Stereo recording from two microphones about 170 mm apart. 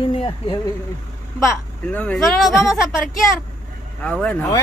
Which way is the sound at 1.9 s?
5° left (ahead or behind).